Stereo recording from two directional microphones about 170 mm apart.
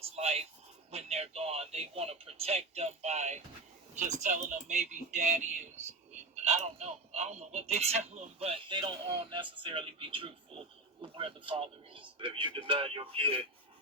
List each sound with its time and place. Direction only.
0.0 s speech: 40° right (ahead or behind)